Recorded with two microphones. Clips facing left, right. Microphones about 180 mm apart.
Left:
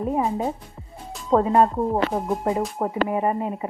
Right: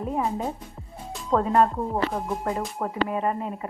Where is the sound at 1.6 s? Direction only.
20° left (ahead or behind).